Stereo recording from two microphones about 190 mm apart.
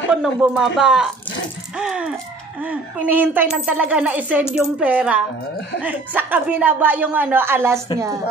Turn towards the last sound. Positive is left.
turn(degrees=-10)  # may be behind; listen again after turning